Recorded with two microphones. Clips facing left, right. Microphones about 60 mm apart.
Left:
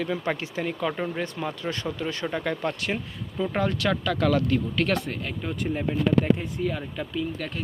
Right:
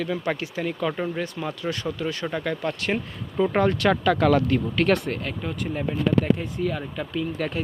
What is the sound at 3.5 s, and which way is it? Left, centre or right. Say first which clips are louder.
Speech: right 4 dB; centre.